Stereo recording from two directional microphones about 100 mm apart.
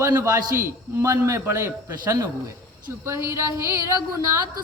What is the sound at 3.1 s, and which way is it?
Speech, 25° right (ahead or behind).